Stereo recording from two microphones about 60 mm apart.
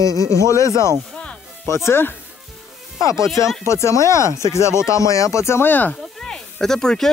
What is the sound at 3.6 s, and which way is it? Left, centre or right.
Speech, left.